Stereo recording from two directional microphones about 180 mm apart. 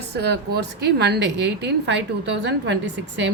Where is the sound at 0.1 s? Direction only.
65° right (ahead or behind).